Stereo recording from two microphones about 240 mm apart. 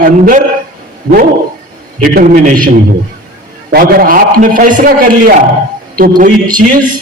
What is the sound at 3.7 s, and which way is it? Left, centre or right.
A man's voice, right.